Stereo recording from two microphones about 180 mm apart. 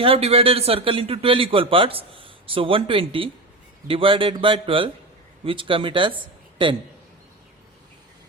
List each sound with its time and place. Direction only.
0.0 s a man's voice: 30° right (ahead or behind)